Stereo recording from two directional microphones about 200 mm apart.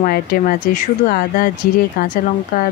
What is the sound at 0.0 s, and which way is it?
Speech, 45° left (ahead or behind).